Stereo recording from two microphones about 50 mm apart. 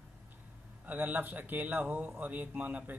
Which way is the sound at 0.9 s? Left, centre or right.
Right.